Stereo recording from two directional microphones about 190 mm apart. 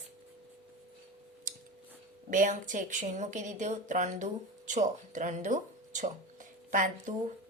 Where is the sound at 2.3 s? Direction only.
45° right (ahead or behind).